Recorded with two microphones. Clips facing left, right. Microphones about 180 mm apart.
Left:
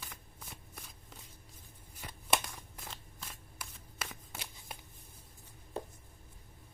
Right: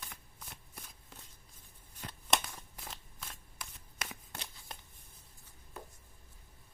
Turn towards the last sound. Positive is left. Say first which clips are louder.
# left 8 dB
turn(degrees=30)  # may be behind; listen again after turning